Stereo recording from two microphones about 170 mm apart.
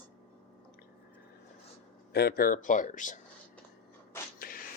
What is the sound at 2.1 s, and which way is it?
Speech, 65° left (ahead or behind).